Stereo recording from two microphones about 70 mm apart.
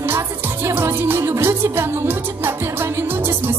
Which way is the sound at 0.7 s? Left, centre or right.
Right.